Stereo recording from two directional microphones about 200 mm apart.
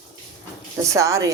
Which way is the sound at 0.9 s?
15° right (ahead or behind).